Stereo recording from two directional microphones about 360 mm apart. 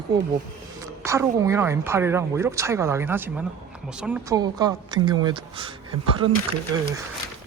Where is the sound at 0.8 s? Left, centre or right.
Centre.